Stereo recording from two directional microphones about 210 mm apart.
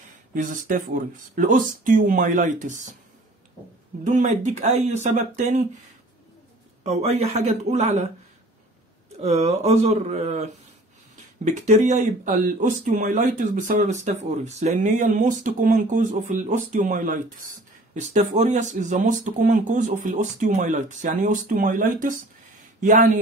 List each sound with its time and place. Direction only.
0.3 s speech: 40° right (ahead or behind)
4.0 s speech: 35° right (ahead or behind)
6.8 s speech: 30° right (ahead or behind)
9.1 s speech: 30° right (ahead or behind)